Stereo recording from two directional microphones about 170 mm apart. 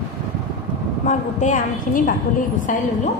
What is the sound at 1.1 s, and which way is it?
A woman's voice, 50° left (ahead or behind).